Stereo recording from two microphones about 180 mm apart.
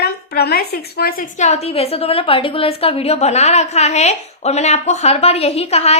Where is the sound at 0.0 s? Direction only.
65° left (ahead or behind).